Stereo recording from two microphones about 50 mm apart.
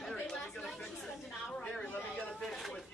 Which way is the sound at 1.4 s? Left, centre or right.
Left.